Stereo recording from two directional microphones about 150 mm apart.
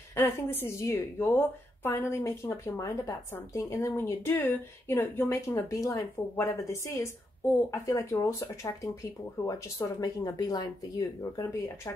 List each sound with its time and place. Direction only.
0.1 s a woman's voice: 15° left (ahead or behind)